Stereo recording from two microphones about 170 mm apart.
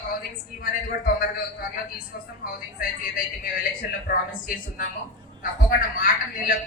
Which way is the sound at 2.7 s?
55° left (ahead or behind).